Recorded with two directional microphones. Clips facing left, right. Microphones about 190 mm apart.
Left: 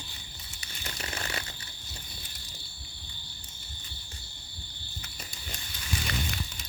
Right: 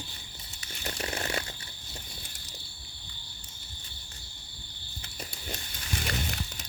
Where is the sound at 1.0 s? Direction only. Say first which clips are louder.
Right 4 dB; 35° right (ahead or behind).